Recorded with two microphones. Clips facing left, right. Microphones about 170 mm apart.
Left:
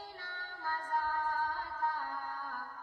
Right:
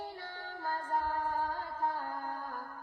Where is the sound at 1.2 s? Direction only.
60° right (ahead or behind).